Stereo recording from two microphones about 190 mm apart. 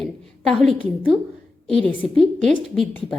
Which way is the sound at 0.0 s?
Centre (ahead or behind).